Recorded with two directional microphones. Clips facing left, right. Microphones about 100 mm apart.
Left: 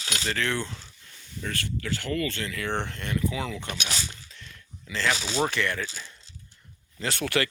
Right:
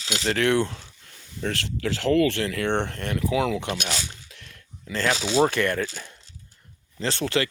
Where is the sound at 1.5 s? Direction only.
90° right.